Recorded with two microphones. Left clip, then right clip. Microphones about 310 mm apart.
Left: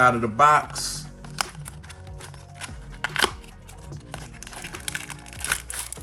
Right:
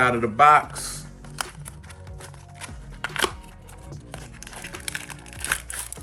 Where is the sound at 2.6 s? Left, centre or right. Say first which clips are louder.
Left 2 dB; centre.